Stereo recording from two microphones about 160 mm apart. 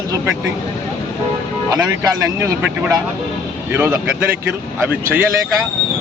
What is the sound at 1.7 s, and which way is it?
A man's voice, 20° right (ahead or behind).